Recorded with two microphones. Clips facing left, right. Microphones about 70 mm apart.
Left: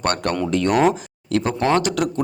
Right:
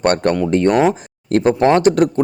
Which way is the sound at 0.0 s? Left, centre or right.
Right.